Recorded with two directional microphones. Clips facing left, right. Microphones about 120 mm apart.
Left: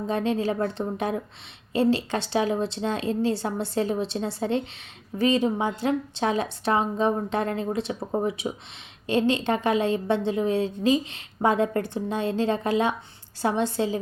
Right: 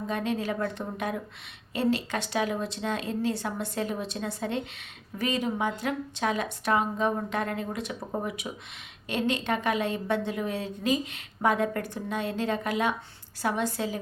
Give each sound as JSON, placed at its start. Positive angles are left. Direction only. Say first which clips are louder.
{"t": 0.1, "sound": "a woman's voice", "louder": "left 5 dB", "side_deg": 30}